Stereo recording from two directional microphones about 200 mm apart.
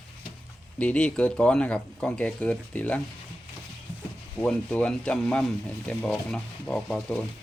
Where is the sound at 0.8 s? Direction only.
5° left (ahead or behind).